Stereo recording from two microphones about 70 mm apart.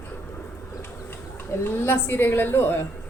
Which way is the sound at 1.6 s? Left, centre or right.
Left.